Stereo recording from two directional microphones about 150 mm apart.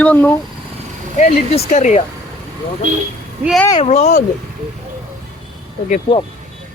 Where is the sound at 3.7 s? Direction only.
45° left (ahead or behind).